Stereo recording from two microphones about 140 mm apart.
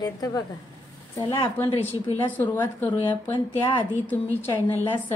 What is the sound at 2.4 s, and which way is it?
A woman's voice, 15° left (ahead or behind).